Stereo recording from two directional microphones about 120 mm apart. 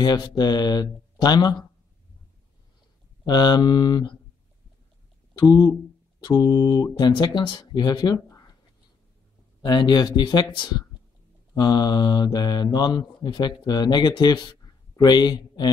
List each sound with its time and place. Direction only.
0.0 s speech: 35° left (ahead or behind)
3.3 s speech: 35° left (ahead or behind)
5.4 s speech: 30° left (ahead or behind)
9.6 s speech: 35° left (ahead or behind)